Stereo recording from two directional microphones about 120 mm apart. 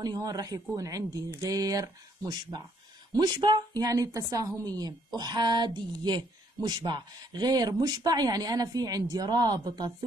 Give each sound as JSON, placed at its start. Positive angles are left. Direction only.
{"t": 0.0, "sound": "a woman's voice", "side_deg": -35}